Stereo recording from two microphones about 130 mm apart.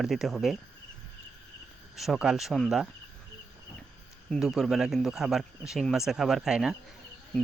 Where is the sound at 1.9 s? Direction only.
Centre (ahead or behind).